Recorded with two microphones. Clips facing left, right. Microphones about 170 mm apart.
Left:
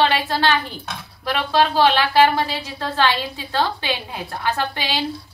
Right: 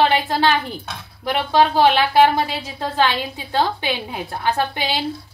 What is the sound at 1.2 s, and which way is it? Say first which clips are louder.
Speech: right 2 dB; 15° right (ahead or behind).